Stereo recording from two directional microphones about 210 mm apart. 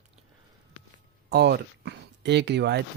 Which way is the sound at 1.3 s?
50° right (ahead or behind).